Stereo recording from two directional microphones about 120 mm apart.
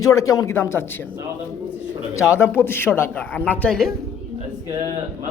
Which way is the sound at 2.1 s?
25° left (ahead or behind).